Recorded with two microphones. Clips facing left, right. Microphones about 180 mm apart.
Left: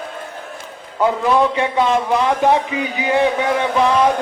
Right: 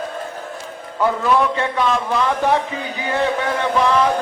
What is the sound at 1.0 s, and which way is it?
A man's voice, 20° left (ahead or behind).